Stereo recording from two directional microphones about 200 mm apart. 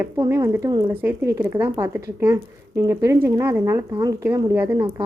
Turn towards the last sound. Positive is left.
turn(degrees=-15)  # may be behind; listen again after turning